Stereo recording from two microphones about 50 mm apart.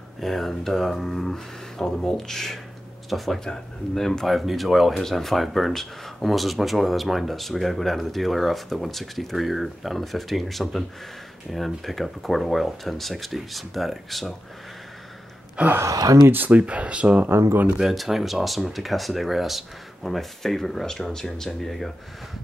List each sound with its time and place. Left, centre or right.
0.2 s speech: centre
4.3 s speech: centre
15.6 s speech: right
16.3 s speech: right
17.3 s speech: right
17.7 s speech: centre